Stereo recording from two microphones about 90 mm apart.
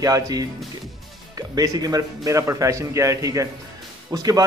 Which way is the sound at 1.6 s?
45° right (ahead or behind).